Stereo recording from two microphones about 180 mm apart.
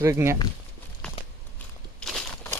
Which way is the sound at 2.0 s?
Centre (ahead or behind).